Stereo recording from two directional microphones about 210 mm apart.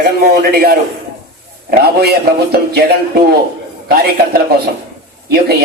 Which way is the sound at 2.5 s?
50° right (ahead or behind).